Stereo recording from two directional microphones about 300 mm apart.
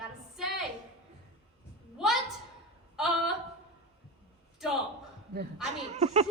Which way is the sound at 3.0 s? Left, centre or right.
Centre.